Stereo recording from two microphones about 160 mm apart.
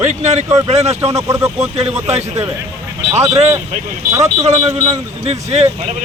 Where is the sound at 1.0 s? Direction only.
20° right (ahead or behind).